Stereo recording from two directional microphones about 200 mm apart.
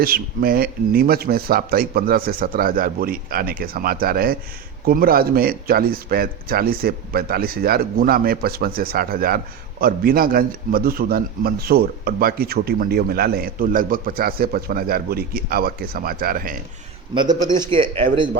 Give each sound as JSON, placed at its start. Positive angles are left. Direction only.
{"t": 0.0, "sound": "a man's voice", "side_deg": -45}
{"t": 17.5, "sound": "speech", "side_deg": -25}